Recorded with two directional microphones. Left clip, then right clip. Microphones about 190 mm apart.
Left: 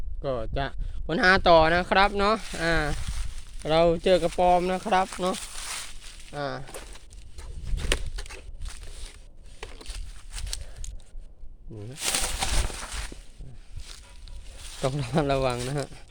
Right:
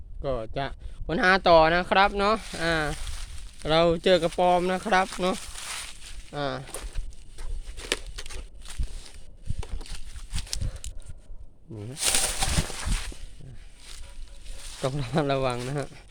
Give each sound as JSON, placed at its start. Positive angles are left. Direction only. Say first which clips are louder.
{"t": 0.2, "sound": "speech", "louder": "even", "side_deg": 0}
{"t": 3.6, "sound": "speech", "louder": "even", "side_deg": -10}
{"t": 5.4, "sound": "walk", "louder": "even", "side_deg": 10}
{"t": 6.3, "sound": "speech", "louder": "right 2 dB", "side_deg": -25}
{"t": 7.3, "sound": "walk", "louder": "left 1 dB", "side_deg": 5}
{"t": 9.7, "sound": "a sound", "louder": "left 1 dB", "side_deg": 10}
{"t": 11.9, "sound": "a sound", "louder": "right 2 dB", "side_deg": -20}
{"t": 14.6, "sound": "a sound", "louder": "left 1 dB", "side_deg": 10}
{"t": 14.8, "sound": "speech", "louder": "left 1 dB", "side_deg": 5}